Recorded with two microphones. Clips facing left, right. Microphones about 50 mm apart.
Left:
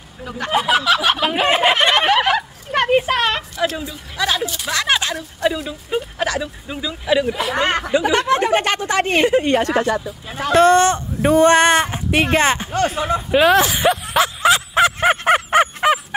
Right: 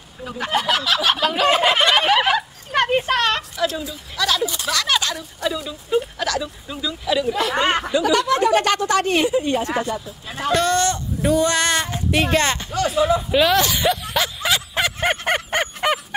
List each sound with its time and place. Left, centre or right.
0.2 s speech: centre
1.2 s speech: left
2.0 s a sound: centre
4.2 s speech: left
7.6 s speech: centre
7.9 s speech: left
9.2 s a woman's voice: left
10.5 s speech: left
12.7 s a sound: left; by 16.2 s centre